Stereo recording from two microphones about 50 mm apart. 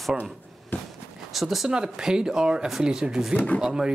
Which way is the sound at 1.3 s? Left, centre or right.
Centre.